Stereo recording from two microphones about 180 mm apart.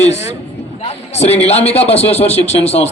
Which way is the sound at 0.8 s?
35° left (ahead or behind).